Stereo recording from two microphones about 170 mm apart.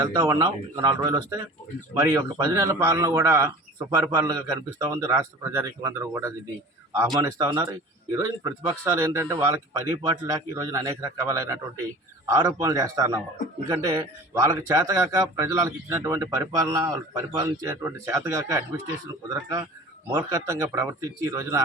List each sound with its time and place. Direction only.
0.0 s a man's voice: 25° right (ahead or behind)